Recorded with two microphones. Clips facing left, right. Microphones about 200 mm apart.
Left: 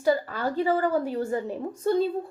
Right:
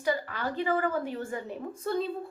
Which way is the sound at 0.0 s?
40° left (ahead or behind).